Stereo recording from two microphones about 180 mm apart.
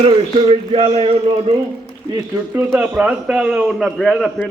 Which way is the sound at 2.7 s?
5° right (ahead or behind).